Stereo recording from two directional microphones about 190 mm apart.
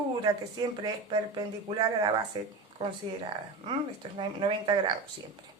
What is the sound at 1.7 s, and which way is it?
Speech, 30° right (ahead or behind).